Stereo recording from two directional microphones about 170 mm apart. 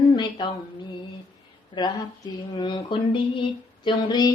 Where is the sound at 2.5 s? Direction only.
30° left (ahead or behind).